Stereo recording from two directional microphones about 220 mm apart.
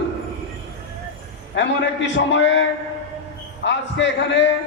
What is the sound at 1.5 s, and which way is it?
A man's voice, 55° left (ahead or behind).